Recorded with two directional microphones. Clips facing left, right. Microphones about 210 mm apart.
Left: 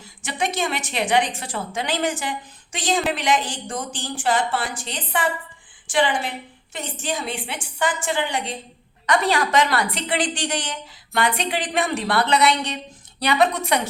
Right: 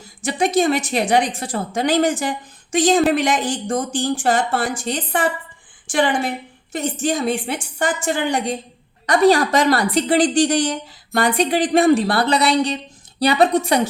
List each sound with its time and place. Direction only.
0.2 s a woman's voice: 35° right (ahead or behind)